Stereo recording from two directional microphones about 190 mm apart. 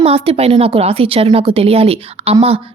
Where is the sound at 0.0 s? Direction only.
30° right (ahead or behind).